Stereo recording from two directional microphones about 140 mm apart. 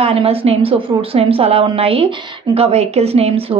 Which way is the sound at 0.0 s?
45° right (ahead or behind).